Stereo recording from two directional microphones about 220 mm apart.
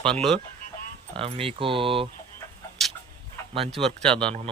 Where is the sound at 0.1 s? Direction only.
Centre (ahead or behind).